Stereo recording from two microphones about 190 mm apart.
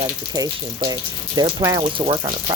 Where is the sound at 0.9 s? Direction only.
20° right (ahead or behind).